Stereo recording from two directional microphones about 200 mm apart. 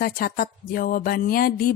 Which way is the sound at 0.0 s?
50° left (ahead or behind).